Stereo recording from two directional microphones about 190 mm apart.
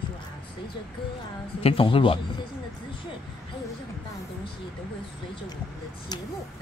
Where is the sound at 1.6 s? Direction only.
30° left (ahead or behind).